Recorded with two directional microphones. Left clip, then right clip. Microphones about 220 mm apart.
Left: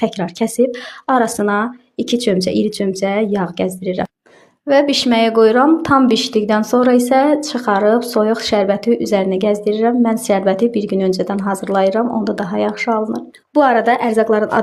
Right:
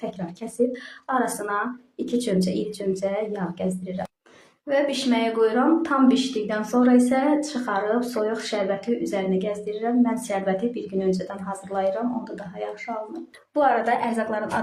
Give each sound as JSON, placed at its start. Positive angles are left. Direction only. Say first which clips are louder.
{"t": 0.3, "sound": "a woman's voice", "louder": "left 8 dB", "side_deg": 40}
{"t": 4.7, "sound": "a woman's voice", "louder": "left 9 dB", "side_deg": 45}